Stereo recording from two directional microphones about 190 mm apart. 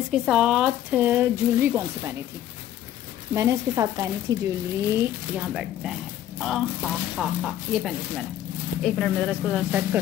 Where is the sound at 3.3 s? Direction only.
15° right (ahead or behind).